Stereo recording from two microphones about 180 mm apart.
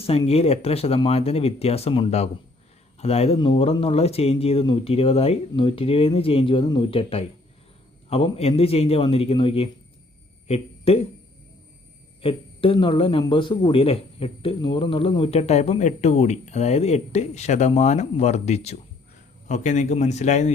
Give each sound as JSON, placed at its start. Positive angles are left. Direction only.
{"t": 0.0, "sound": "speech", "side_deg": 35}
{"t": 12.2, "sound": "speech", "side_deg": 30}